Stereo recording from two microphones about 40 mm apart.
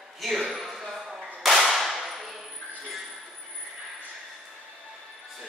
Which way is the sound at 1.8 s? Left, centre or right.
Centre.